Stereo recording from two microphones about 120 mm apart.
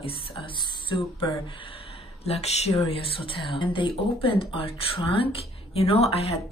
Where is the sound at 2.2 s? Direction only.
60° left (ahead or behind).